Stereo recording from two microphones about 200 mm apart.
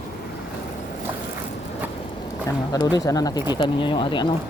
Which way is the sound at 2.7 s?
20° left (ahead or behind).